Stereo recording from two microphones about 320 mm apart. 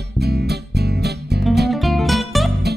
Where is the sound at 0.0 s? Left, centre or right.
Right.